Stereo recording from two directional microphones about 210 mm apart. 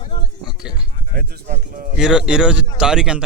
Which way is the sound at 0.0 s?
25° left (ahead or behind).